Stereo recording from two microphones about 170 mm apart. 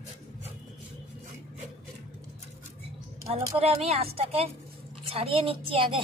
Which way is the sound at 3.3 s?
35° right (ahead or behind).